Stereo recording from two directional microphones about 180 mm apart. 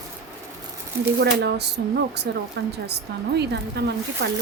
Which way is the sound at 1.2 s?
65° right (ahead or behind).